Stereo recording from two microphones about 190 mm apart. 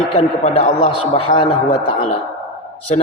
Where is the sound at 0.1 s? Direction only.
35° left (ahead or behind).